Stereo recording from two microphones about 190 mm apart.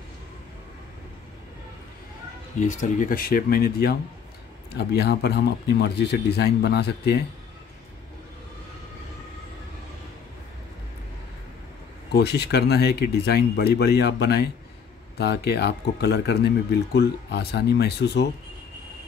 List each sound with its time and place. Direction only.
2.6 s speech: 40° left (ahead or behind); by 7.2 s 60° left (ahead or behind)
12.1 s speech: 60° left (ahead or behind)